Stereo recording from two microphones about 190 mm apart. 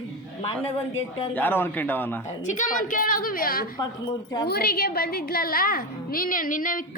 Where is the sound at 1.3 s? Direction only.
10° left (ahead or behind).